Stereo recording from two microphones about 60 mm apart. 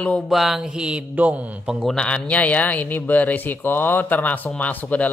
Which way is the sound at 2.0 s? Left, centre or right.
Centre.